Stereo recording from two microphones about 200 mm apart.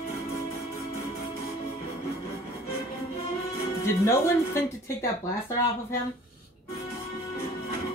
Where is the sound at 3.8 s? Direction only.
15° left (ahead or behind).